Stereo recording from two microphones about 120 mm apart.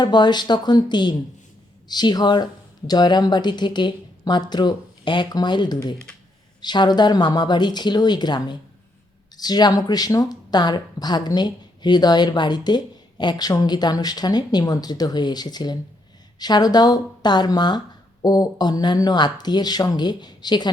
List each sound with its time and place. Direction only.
0.0 s speech: 35° left (ahead or behind)